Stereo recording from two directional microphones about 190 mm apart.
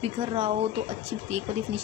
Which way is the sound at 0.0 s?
30° right (ahead or behind).